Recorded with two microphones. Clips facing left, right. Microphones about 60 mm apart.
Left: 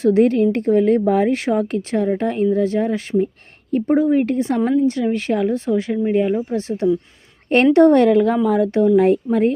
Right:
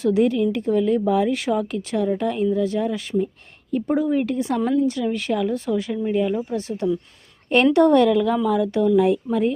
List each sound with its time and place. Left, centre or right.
0.0 s a woman's voice: left